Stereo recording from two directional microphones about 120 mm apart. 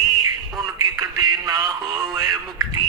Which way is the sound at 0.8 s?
30° right (ahead or behind).